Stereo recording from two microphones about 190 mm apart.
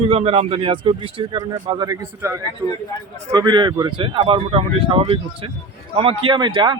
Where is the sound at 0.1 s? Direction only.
30° right (ahead or behind).